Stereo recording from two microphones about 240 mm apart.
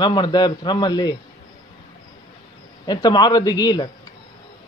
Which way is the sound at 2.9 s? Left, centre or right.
Centre.